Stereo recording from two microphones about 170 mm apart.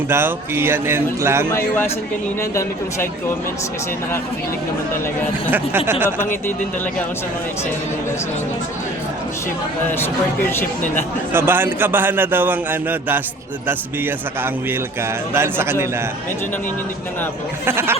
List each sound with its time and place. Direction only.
0.1 s a man's voice: 15° right (ahead or behind)
1.5 s speech: 15° left (ahead or behind)
5.5 s a man's voice: 10° right (ahead or behind)
10.5 s speech: 15° left (ahead or behind)
11.3 s a man's voice: 10° right (ahead or behind)
17.7 s a man's voice: 15° right (ahead or behind)